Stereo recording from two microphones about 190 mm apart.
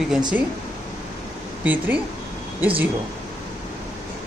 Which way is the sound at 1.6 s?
10° right (ahead or behind).